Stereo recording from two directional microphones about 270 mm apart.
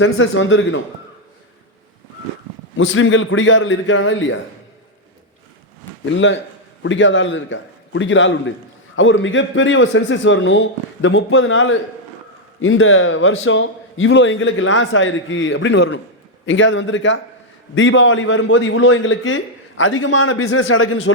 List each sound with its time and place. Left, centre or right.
0.0 s a man's voice: left
2.7 s a man's voice: left
6.1 s a man's voice: left